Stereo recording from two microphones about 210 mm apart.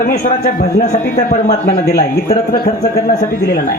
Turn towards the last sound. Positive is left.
turn(degrees=45)  # may be behind; listen again after turning